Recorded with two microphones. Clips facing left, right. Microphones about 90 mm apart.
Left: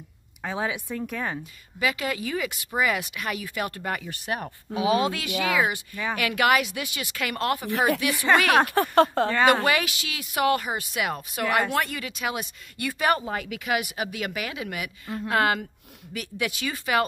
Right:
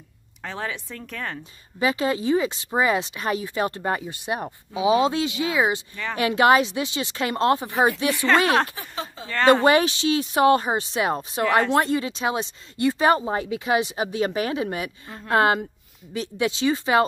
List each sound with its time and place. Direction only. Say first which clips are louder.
0.4 s speech: left 2 dB; 10° left (ahead or behind)
1.8 s speech: right 5 dB; 30° right (ahead or behind)
8.7 s speech: left 14 dB; 60° left (ahead or behind)
9.5 s speech: right 5 dB; 30° right (ahead or behind)